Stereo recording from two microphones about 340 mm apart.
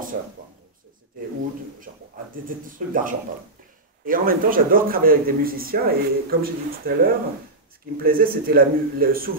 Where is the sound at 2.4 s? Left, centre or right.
Right.